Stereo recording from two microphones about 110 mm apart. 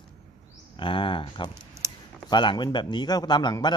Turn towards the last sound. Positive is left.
turn(degrees=40)  # may be behind; listen again after turning